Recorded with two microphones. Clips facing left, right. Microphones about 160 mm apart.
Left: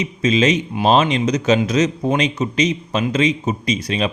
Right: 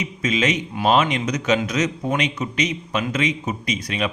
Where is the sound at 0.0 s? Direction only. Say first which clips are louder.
Left 5 dB; 30° left (ahead or behind).